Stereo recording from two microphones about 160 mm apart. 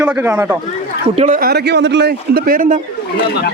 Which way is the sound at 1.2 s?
60° right (ahead or behind).